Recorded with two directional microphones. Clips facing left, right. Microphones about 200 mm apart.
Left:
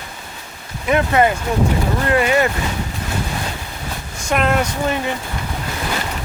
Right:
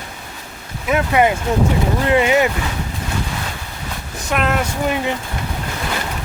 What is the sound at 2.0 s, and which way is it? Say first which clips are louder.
Speech: right 1 dB; 20° right (ahead or behind).